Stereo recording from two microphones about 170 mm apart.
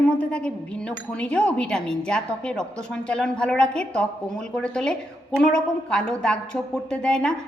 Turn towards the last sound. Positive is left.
turn(degrees=5)  # may be behind; listen again after turning